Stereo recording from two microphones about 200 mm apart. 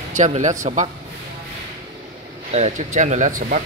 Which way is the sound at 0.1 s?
35° right (ahead or behind).